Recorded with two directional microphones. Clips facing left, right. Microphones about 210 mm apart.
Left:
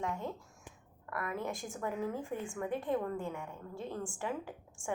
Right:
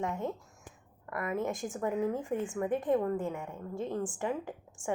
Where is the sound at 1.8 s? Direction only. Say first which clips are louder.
Right 5 dB; 20° right (ahead or behind).